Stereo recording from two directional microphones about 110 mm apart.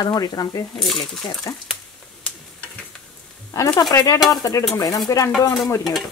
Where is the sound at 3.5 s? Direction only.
30° left (ahead or behind).